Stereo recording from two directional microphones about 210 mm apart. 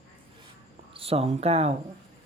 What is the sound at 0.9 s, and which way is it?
Speech, 25° right (ahead or behind).